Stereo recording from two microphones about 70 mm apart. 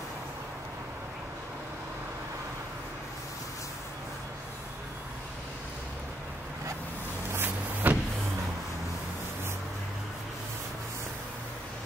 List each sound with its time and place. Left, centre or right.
7.3 s vehicle: right